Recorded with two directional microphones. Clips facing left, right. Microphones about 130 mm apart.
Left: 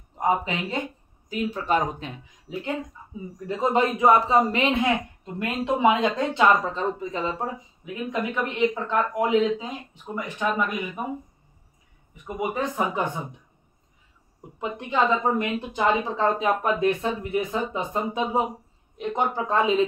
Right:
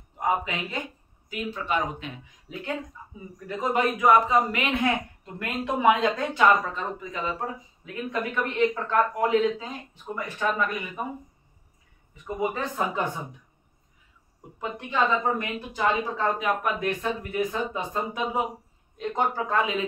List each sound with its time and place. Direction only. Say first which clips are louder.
1.3 s speech: left 4 dB; 35° left (ahead or behind)
2.5 s speech: left 3 dB; 20° left (ahead or behind)
7.8 s speech: left 2 dB; 15° left (ahead or behind)
12.4 s speech: left 2 dB; 15° left (ahead or behind)
14.6 s speech: left 2 dB; 25° left (ahead or behind)